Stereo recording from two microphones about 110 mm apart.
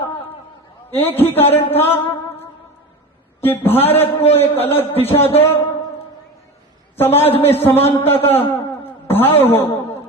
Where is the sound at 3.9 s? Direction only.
65° left (ahead or behind).